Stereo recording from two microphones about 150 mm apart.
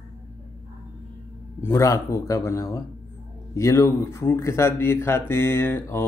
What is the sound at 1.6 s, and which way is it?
Speech, 20° left (ahead or behind).